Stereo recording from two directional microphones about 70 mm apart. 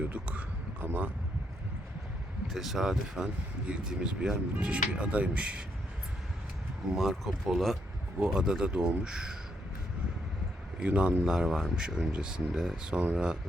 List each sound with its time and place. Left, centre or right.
0.0 s a sound: right
0.9 s speech: right
2.5 s speech: centre
6.9 s speech: centre
8.2 s speech: centre
10.8 s speech: centre